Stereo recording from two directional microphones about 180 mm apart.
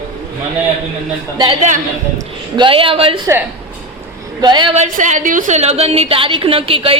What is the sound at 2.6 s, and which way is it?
Speech, 30° right (ahead or behind).